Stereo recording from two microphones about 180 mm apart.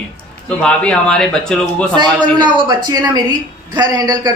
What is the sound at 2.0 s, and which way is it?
A woman's voice, 25° right (ahead or behind).